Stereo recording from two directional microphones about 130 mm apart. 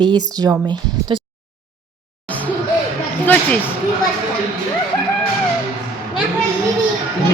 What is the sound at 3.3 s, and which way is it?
Speech, 10° left (ahead or behind).